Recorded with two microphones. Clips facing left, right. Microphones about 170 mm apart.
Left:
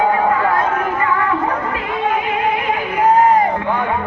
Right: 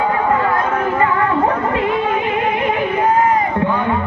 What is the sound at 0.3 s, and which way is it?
Chatter, 30° right (ahead or behind).